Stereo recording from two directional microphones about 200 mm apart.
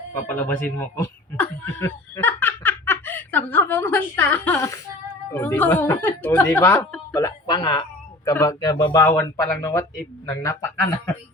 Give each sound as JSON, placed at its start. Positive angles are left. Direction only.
{"t": 0.3, "sound": "a woman's voice", "side_deg": 10}
{"t": 2.1, "sound": "snicker", "side_deg": 10}
{"t": 5.3, "sound": "a woman's voice", "side_deg": 10}